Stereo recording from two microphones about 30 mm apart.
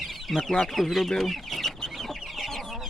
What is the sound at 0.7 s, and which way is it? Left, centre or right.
Speech, centre.